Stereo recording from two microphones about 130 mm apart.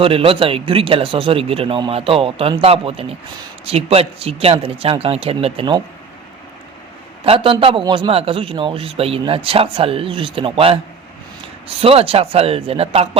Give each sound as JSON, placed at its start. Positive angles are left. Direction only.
{"t": 0.0, "sound": "a man's voice", "side_deg": -45}
{"t": 7.3, "sound": "a man's voice", "side_deg": -45}
{"t": 11.8, "sound": "a man's voice", "side_deg": -50}